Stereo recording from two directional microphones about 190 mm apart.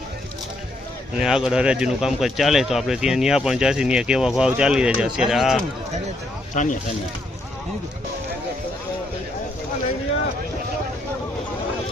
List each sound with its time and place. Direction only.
1.2 s speech: 5° right (ahead or behind)
6.5 s speech: 40° left (ahead or behind)